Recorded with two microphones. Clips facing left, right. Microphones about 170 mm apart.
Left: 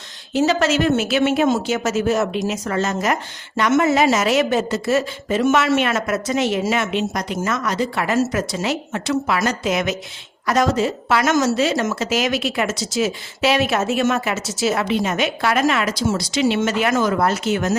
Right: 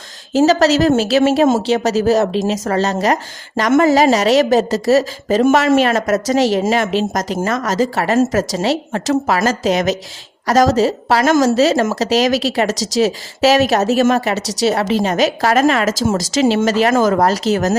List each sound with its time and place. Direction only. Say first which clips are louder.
0.3 s a woman's voice: right 5 dB; 40° right (ahead or behind)